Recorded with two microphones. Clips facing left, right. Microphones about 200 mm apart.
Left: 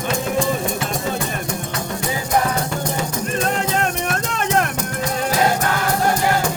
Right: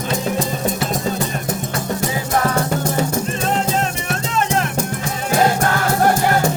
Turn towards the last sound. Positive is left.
turn(degrees=55)  # may be behind; listen again after turning